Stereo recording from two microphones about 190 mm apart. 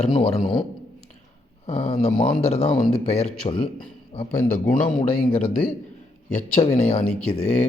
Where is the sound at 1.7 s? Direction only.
35° left (ahead or behind).